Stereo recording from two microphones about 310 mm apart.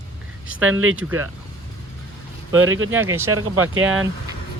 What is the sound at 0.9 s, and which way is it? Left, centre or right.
Speech, centre.